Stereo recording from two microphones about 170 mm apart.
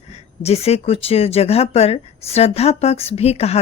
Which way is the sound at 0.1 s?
35° left (ahead or behind).